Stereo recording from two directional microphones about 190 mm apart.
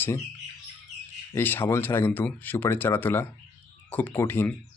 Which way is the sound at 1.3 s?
10° left (ahead or behind).